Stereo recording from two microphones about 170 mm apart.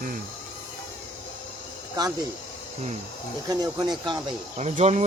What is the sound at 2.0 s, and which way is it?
Speech, 25° right (ahead or behind).